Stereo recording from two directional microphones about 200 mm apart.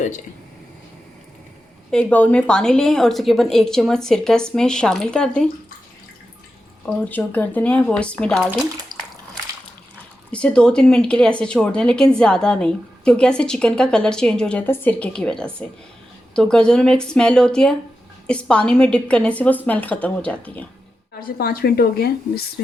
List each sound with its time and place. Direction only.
1.9 s speech: 5° left (ahead or behind)
7.0 s speech: 10° left (ahead or behind)
10.3 s a woman's voice: 5° left (ahead or behind)
21.2 s a woman's voice: 50° left (ahead or behind)